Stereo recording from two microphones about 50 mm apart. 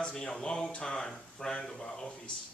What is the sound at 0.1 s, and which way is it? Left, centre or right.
Speech, centre.